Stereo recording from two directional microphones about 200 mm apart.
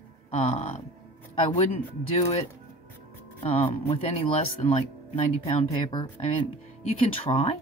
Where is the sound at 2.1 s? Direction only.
30° left (ahead or behind).